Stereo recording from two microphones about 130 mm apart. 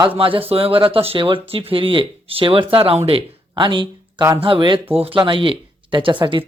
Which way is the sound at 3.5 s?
35° right (ahead or behind).